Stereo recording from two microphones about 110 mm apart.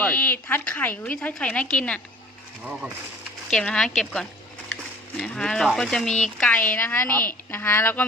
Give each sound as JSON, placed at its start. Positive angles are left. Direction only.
{"t": 0.0, "sound": "a woman's voice", "side_deg": 15}
{"t": 3.5, "sound": "speech", "side_deg": 5}
{"t": 6.4, "sound": "a woman's voice", "side_deg": 15}